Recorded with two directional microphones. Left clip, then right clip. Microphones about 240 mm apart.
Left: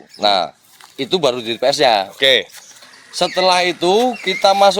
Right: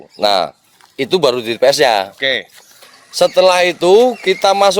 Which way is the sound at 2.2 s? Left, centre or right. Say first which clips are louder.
Left 4 dB; centre.